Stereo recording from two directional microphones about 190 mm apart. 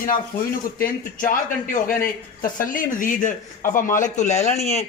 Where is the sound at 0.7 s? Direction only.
45° left (ahead or behind).